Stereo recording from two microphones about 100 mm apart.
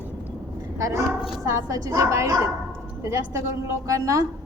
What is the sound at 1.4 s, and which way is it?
Speech, 30° right (ahead or behind).